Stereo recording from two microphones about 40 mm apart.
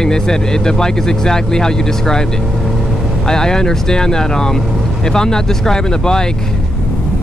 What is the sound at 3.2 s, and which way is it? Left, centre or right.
Speech, centre.